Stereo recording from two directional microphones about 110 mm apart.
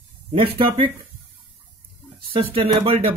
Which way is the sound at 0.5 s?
55° right (ahead or behind).